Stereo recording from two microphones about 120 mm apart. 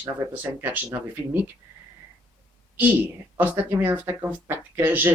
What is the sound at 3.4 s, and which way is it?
Speech, 15° right (ahead or behind).